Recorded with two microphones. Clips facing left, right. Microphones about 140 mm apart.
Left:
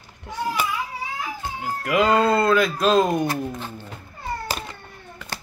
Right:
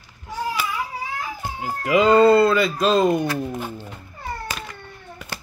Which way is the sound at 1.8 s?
Centre (ahead or behind).